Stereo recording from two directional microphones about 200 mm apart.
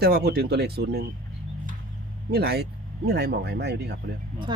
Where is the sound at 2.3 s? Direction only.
50° right (ahead or behind).